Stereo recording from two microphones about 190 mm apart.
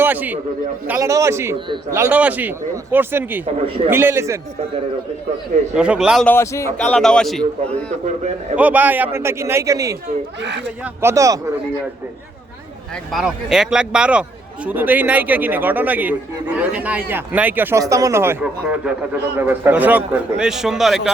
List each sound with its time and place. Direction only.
0.0 s a man's voice: 10° right (ahead or behind)
5.7 s a man's voice: 5° right (ahead or behind)
6.3 s a man's voice: 15° left (ahead or behind)
8.5 s a man's voice: 10° right (ahead or behind)
11.0 s a man's voice: 15° right (ahead or behind)
13.1 s a man's voice: centre (ahead or behind)